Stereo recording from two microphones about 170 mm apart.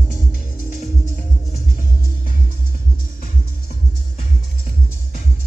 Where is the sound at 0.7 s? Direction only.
45° left (ahead or behind).